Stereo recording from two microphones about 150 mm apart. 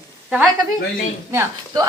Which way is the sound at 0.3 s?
5° right (ahead or behind).